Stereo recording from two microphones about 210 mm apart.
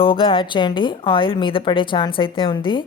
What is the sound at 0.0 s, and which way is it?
Speech, 25° left (ahead or behind).